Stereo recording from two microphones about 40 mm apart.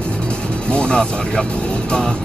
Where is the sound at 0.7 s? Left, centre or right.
Left.